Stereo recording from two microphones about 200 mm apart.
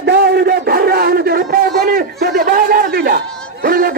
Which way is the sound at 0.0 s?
55° right (ahead or behind).